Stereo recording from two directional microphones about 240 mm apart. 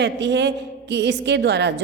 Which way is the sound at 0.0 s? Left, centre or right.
Right.